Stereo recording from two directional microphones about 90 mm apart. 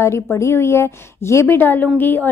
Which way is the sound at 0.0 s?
30° left (ahead or behind).